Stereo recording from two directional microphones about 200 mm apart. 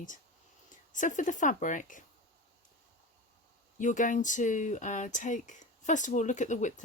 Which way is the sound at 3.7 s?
40° left (ahead or behind).